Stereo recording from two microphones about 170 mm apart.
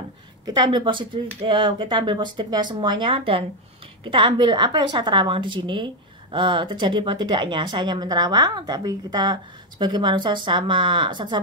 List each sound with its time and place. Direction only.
0.5 s speech: 25° right (ahead or behind)